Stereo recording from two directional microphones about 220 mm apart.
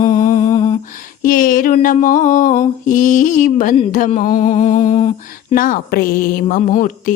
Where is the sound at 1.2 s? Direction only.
40° left (ahead or behind).